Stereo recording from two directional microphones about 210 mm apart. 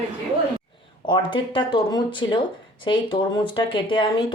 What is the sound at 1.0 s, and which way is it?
Speech, 20° left (ahead or behind).